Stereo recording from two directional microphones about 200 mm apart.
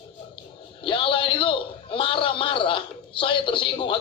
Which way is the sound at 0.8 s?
25° left (ahead or behind).